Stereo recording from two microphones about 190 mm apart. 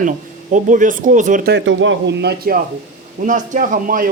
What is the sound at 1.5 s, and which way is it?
Speech, 75° right (ahead or behind).